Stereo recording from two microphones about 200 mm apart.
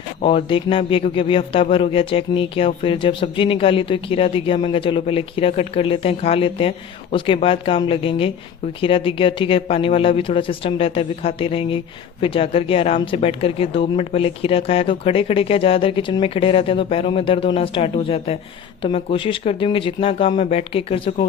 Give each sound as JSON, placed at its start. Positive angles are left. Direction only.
{"t": 0.2, "sound": "speech", "side_deg": 30}